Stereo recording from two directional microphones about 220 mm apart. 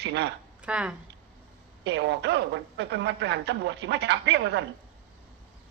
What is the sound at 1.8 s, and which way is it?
A woman's voice, 50° right (ahead or behind).